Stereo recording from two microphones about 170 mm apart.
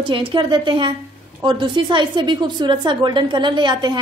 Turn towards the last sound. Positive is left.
turn(degrees=-25)  # may be behind; listen again after turning